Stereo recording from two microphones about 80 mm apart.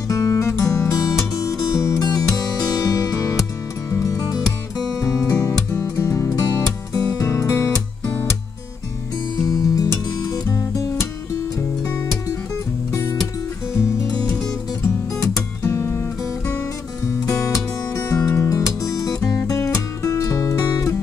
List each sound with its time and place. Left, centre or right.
0.1 s music: left
5.7 s music: left
7.2 s music: left
9.4 s music: left
12.9 s music: left
15.6 s music: left
20.6 s music: left